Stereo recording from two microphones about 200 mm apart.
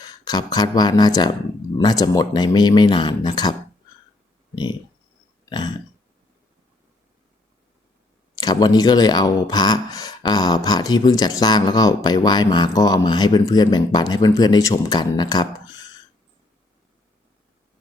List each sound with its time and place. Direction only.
0.0 s speech: 20° left (ahead or behind)
4.5 s a sound: 20° left (ahead or behind)
8.4 s speech: 20° left (ahead or behind)